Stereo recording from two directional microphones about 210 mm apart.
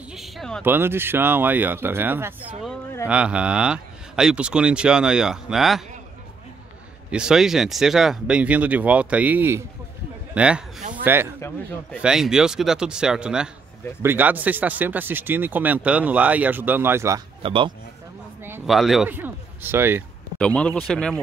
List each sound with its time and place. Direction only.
0.1 s a sound: centre (ahead or behind)
0.7 s speech: 10° right (ahead or behind)
7.1 s a man's voice: 5° right (ahead or behind)
10.8 s a sound: 40° right (ahead or behind)
11.3 s a man's voice: 10° left (ahead or behind)
12.0 s speech: 5° right (ahead or behind)
17.4 s speech: 25° right (ahead or behind)
18.7 s speech: centre (ahead or behind)
20.3 s speech: 5° left (ahead or behind)